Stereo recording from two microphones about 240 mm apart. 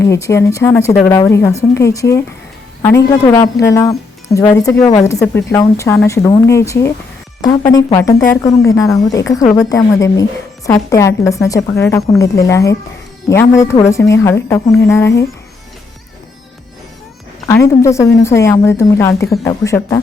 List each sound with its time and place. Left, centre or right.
0.0 s a woman's voice: centre
17.5 s a woman's voice: centre